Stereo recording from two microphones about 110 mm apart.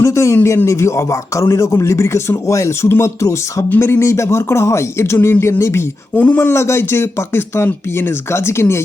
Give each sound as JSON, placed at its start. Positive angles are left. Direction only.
{"t": 0.0, "sound": "speech", "side_deg": 25}